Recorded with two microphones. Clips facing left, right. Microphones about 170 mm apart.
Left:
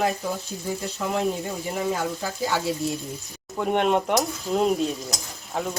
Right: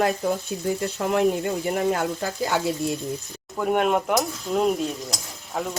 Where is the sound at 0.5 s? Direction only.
65° right (ahead or behind).